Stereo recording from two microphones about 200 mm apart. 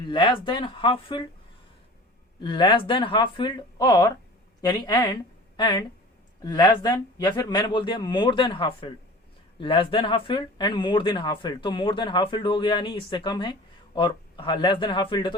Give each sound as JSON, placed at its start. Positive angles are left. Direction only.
{"t": 0.1, "sound": "speech", "side_deg": 25}
{"t": 2.4, "sound": "speech", "side_deg": 25}